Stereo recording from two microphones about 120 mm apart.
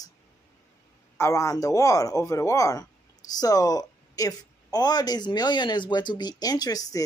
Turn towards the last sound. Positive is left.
turn(degrees=30)  # may be behind; listen again after turning